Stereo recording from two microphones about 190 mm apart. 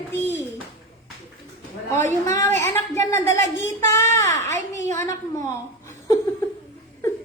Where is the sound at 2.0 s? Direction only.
15° left (ahead or behind).